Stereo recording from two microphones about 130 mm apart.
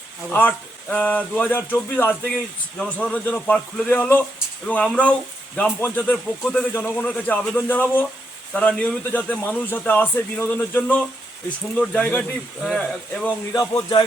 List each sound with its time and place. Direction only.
0.3 s a man's voice: 10° left (ahead or behind)
13.5 s speech: 30° left (ahead or behind)